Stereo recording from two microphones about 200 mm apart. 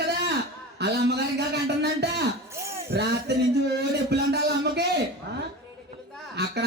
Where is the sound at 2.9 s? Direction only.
60° right (ahead or behind).